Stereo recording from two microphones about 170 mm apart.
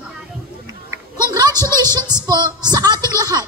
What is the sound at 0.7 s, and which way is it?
Music, 20° right (ahead or behind).